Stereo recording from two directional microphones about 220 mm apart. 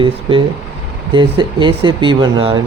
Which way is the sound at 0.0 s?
20° right (ahead or behind).